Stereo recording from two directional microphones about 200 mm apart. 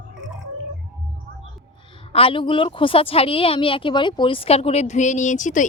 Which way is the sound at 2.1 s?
30° left (ahead or behind).